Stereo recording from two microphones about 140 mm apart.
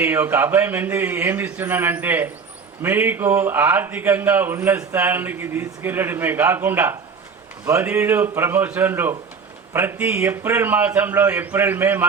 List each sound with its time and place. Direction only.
0.0 s a man's voice: 15° right (ahead or behind)